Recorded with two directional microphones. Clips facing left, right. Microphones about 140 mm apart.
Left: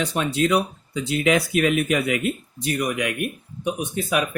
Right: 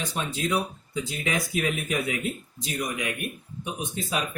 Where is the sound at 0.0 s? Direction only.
70° left (ahead or behind).